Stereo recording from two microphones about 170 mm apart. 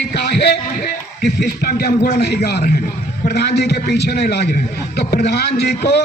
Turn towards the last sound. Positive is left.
turn(degrees=75)  # may be behind; listen again after turning